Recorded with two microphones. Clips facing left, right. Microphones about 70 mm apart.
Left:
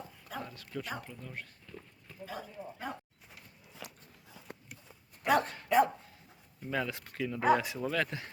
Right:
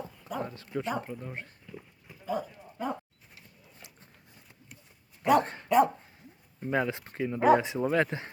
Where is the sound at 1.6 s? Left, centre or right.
Centre.